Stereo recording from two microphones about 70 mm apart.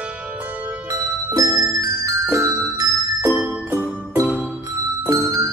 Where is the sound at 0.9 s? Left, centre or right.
Right.